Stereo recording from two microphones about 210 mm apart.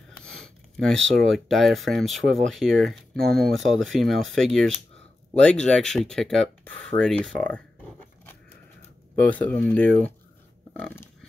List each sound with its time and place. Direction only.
0.4 s a sound: 5° left (ahead or behind)
1.2 s speech: centre (ahead or behind)
9.2 s speech: 5° left (ahead or behind)